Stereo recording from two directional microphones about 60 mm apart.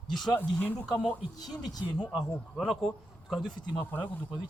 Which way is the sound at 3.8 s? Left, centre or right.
Left.